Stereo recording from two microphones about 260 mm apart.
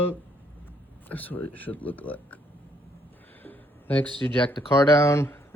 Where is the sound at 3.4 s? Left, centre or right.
Centre.